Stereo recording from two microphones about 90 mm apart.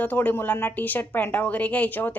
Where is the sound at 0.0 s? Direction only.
20° left (ahead or behind).